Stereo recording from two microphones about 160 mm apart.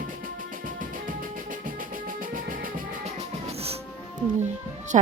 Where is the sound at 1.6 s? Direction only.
55° right (ahead or behind).